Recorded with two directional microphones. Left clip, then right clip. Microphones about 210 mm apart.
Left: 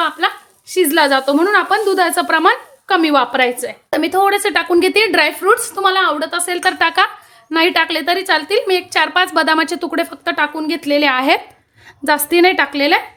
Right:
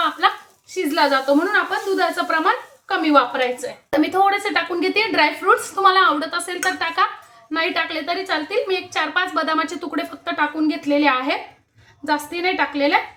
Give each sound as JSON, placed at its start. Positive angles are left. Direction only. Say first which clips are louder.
{"t": 0.2, "sound": "a sound", "louder": "right 2 dB", "side_deg": 30}
{"t": 0.7, "sound": "a woman's voice", "louder": "left 5 dB", "side_deg": 50}
{"t": 3.8, "sound": "a woman's voice", "louder": "left 3 dB", "side_deg": 35}